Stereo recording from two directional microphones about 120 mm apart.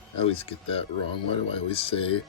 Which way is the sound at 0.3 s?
50° left (ahead or behind).